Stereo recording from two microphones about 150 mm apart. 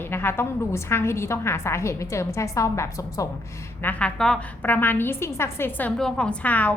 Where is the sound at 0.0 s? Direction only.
15° left (ahead or behind).